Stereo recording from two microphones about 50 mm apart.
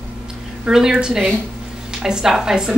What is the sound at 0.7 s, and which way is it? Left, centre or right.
A woman's voice, centre.